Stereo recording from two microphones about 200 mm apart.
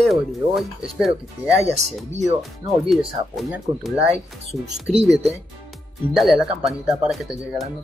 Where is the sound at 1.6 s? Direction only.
35° right (ahead or behind).